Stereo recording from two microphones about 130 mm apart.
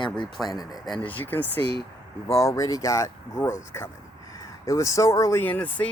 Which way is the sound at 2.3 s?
25° left (ahead or behind).